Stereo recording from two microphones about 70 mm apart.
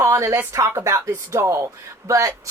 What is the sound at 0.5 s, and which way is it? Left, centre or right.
A woman's voice, right.